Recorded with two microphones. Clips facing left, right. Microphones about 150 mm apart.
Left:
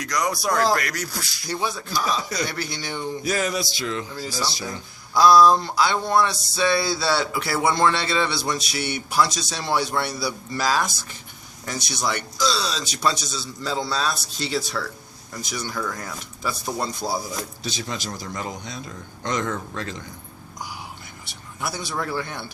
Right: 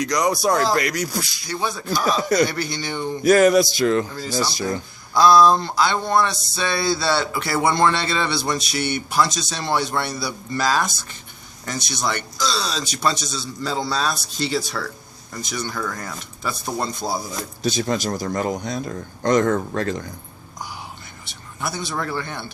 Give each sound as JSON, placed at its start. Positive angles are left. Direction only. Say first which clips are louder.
{"t": 0.0, "sound": "speech", "louder": "right 5 dB", "side_deg": -20}
{"t": 1.9, "sound": "a man's voice", "louder": "right 10 dB", "side_deg": -50}
{"t": 2.5, "sound": "a sound", "louder": "right 3 dB", "side_deg": 0}
{"t": 3.2, "sound": "a man's voice", "louder": "right 13 dB", "side_deg": -55}
{"t": 5.1, "sound": "a sound", "louder": "right 1 dB", "side_deg": 10}
{"t": 17.6, "sound": "a man's voice", "louder": "right 9 dB", "side_deg": -45}
{"t": 21.6, "sound": "a man's voice", "louder": "right 2 dB", "side_deg": 10}